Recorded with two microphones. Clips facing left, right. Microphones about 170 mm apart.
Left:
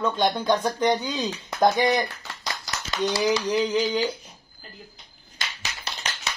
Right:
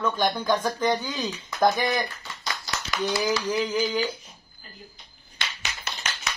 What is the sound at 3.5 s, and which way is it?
Speech, 25° left (ahead or behind).